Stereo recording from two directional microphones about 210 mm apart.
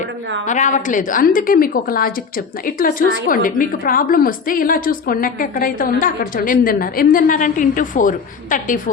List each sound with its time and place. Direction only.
0.4 s a woman's voice: 35° left (ahead or behind)